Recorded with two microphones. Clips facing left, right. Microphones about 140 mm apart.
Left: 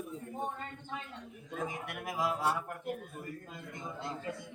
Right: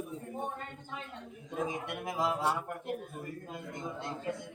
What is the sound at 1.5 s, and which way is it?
Speech, 20° right (ahead or behind).